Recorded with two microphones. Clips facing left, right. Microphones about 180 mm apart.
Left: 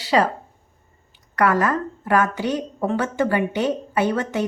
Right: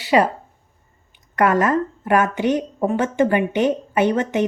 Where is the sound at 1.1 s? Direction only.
20° right (ahead or behind).